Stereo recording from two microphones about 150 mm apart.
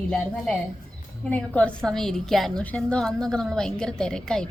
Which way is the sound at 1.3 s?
10° left (ahead or behind).